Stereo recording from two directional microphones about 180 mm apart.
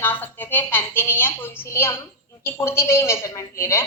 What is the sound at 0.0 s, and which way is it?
A woman's voice, 10° left (ahead or behind).